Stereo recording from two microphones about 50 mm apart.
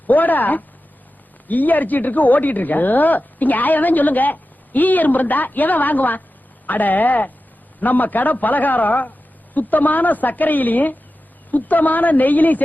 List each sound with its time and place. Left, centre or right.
0.1 s speech: left